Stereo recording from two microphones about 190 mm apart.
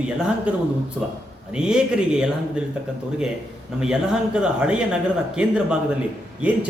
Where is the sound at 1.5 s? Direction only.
5° right (ahead or behind).